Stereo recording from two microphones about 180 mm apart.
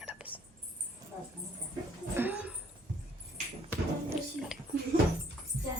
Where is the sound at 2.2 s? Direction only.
10° right (ahead or behind).